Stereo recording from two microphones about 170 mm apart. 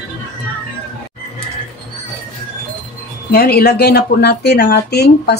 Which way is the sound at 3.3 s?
65° left (ahead or behind).